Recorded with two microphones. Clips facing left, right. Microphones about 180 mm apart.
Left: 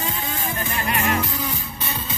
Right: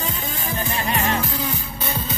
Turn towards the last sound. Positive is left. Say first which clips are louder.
# even
turn(degrees=-30)  # may be behind; listen again after turning